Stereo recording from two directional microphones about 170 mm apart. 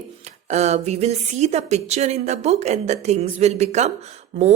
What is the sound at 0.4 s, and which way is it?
Speech, 40° right (ahead or behind).